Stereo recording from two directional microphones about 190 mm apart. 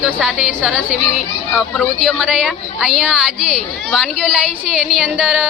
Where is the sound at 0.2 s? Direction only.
5° right (ahead or behind).